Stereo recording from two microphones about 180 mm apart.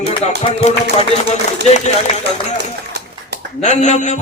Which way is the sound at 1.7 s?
40° left (ahead or behind).